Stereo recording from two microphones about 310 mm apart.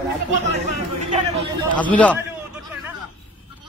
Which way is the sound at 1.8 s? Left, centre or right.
Centre.